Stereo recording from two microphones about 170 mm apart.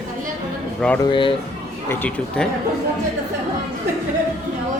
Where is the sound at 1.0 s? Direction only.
30° left (ahead or behind).